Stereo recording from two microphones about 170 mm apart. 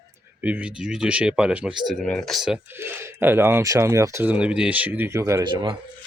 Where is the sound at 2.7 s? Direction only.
15° right (ahead or behind).